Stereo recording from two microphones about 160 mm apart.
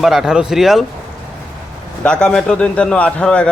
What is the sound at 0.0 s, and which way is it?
Speech, centre (ahead or behind).